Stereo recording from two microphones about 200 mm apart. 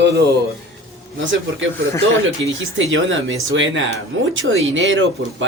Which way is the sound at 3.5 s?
70° right (ahead or behind).